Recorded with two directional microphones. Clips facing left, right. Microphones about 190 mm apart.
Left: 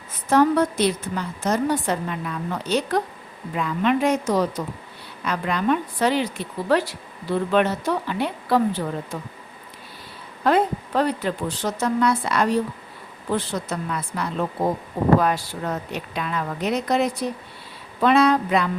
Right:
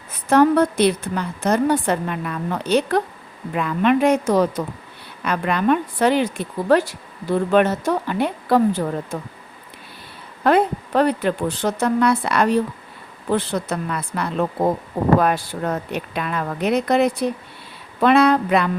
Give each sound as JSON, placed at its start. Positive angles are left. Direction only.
{"t": 0.3, "sound": "a woman's voice", "side_deg": -60}
{"t": 10.4, "sound": "a woman's voice", "side_deg": -60}